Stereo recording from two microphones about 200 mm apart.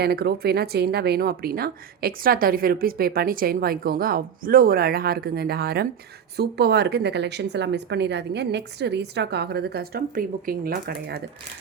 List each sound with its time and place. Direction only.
0.0 s speech: 55° right (ahead or behind)